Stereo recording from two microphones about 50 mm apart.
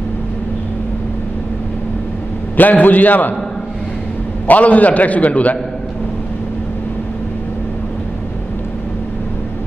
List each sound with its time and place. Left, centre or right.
2.5 s a man's voice: left
4.5 s a man's voice: left